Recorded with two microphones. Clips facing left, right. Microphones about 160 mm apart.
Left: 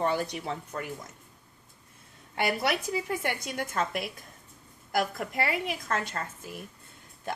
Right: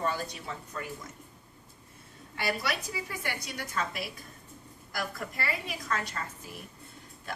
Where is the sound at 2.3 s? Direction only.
55° left (ahead or behind).